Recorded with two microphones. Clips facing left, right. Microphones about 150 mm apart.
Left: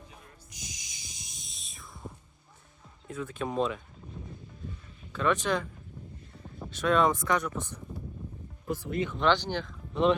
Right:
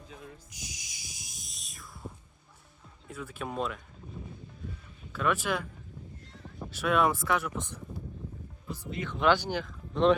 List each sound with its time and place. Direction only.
0.5 s music: 10° right (ahead or behind)
3.1 s speech: 10° right (ahead or behind)
5.1 s speech: 5° right (ahead or behind)
6.7 s speech: 10° right (ahead or behind)
8.6 s speech: 55° left (ahead or behind)
9.1 s speech: 5° right (ahead or behind)